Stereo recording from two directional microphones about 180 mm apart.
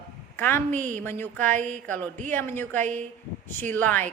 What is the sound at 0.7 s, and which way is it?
Speech, 45° right (ahead or behind).